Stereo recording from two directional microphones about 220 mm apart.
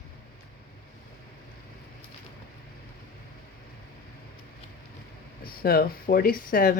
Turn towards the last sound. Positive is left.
turn(degrees=40)  # may be behind; listen again after turning